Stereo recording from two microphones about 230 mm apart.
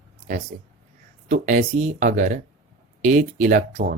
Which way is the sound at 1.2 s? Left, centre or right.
Right.